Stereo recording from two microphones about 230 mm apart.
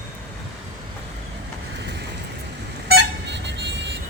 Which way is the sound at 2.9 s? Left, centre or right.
Right.